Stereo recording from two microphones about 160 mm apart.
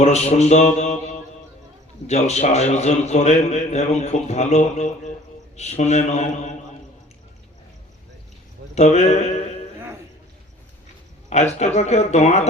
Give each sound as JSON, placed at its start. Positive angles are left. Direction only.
{"t": 0.0, "sound": "a man's voice", "side_deg": 45}
{"t": 2.0, "sound": "a man's voice", "side_deg": 45}
{"t": 8.7, "sound": "a man's voice", "side_deg": 45}
{"t": 11.3, "sound": "a man's voice", "side_deg": 45}